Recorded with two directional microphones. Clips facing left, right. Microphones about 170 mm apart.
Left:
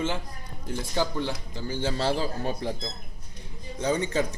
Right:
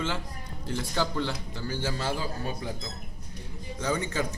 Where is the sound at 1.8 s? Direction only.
30° left (ahead or behind).